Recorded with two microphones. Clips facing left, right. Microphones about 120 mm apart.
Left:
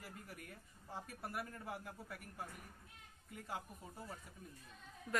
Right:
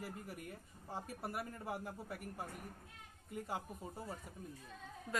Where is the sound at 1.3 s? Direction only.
35° right (ahead or behind).